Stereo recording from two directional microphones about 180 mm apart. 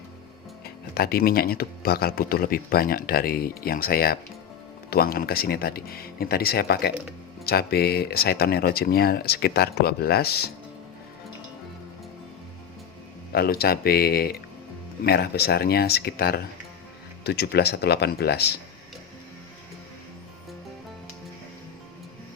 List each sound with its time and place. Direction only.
0.6 s speech: 60° left (ahead or behind)
13.3 s speech: 60° left (ahead or behind)